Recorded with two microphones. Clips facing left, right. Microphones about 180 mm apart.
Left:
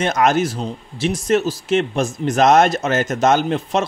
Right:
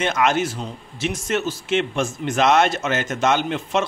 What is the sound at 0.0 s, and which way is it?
Speech, 40° left (ahead or behind).